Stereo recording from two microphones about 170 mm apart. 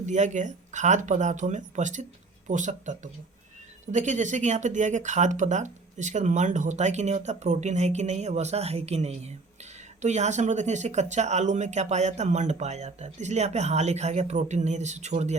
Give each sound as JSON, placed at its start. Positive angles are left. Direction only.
{"t": 0.0, "sound": "speech", "side_deg": -45}